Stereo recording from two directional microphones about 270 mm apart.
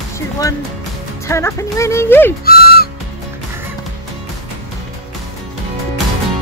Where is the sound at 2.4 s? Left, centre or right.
Left.